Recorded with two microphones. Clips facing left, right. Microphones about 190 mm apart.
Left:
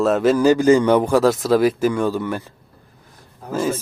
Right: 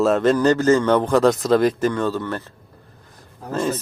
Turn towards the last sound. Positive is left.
turn(degrees=5)  # may be behind; listen again after turning